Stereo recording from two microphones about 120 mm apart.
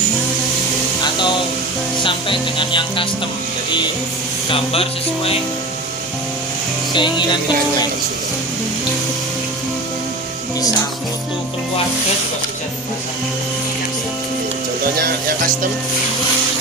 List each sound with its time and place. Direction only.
2.0 s music: 45° left (ahead or behind)
4.5 s music: 50° left (ahead or behind)
6.9 s music: 40° left (ahead or behind)